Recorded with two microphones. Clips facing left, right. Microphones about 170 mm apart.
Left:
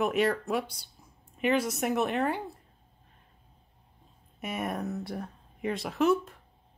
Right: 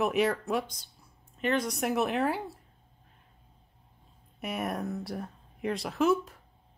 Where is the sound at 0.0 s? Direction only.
Centre (ahead or behind).